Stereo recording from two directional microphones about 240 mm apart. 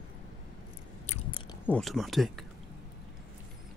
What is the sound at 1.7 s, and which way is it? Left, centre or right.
Speech, centre.